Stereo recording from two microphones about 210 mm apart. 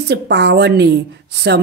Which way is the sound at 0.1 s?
55° right (ahead or behind).